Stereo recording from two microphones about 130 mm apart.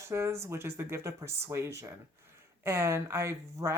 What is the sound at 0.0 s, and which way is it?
Speech, 20° right (ahead or behind).